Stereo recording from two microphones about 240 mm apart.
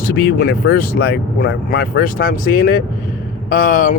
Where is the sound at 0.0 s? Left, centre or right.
Left.